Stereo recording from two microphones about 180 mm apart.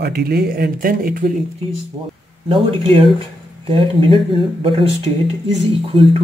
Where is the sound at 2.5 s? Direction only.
30° right (ahead or behind).